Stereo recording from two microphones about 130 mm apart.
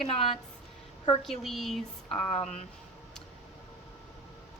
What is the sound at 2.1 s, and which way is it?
Speech, 50° left (ahead or behind).